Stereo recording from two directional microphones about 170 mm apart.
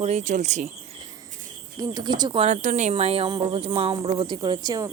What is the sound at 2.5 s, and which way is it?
Speech, 45° right (ahead or behind).